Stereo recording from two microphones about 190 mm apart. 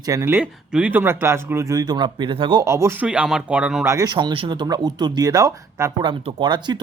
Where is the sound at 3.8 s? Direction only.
20° right (ahead or behind).